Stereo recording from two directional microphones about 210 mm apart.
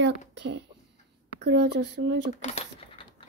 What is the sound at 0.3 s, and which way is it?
Speech, 55° right (ahead or behind).